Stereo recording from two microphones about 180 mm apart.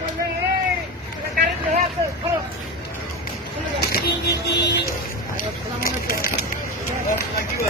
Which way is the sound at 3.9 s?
65° left (ahead or behind).